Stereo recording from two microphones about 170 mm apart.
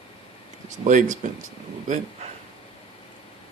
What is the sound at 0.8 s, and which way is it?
Speech, 50° right (ahead or behind).